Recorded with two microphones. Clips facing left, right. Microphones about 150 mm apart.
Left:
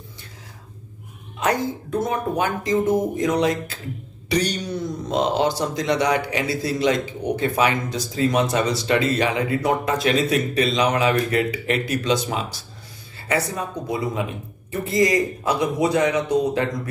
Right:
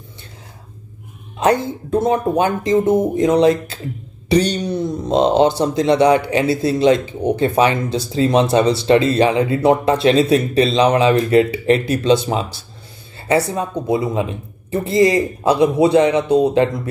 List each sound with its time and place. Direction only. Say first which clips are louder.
1.4 s speech: right 6 dB; 25° right (ahead or behind)